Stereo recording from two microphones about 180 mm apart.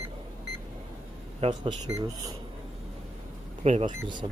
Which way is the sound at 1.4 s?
25° right (ahead or behind).